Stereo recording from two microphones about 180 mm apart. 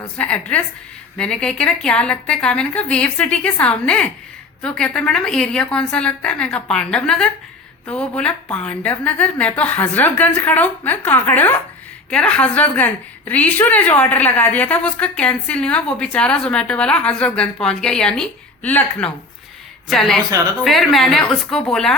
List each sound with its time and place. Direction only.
0.2 s a woman's voice: 5° left (ahead or behind)
20.3 s a woman's voice: 20° right (ahead or behind)
20.7 s a woman's voice: centre (ahead or behind)